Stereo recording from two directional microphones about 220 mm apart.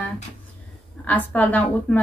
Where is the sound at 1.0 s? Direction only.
5° left (ahead or behind).